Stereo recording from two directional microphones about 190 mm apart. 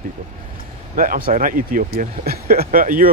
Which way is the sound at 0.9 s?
45° right (ahead or behind).